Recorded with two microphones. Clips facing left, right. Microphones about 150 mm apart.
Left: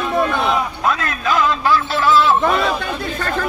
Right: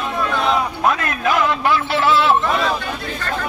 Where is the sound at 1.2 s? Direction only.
65° right (ahead or behind).